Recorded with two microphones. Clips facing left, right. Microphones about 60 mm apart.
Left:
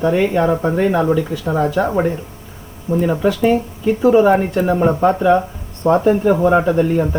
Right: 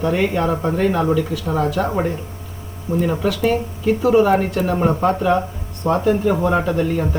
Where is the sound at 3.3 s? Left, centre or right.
Left.